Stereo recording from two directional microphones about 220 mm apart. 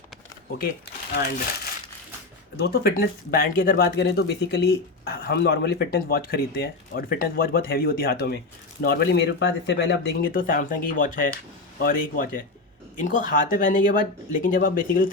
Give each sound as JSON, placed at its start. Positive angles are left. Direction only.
{"t": 2.6, "sound": "speech", "side_deg": 45}